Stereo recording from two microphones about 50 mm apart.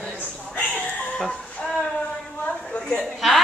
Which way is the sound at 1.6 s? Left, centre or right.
Left.